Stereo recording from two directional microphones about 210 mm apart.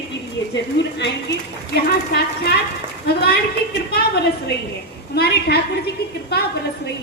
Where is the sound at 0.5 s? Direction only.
55° left (ahead or behind).